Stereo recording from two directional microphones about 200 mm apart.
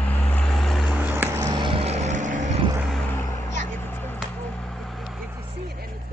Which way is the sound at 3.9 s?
10° left (ahead or behind).